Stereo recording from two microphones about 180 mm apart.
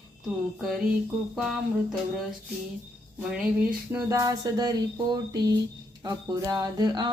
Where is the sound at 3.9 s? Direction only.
20° right (ahead or behind).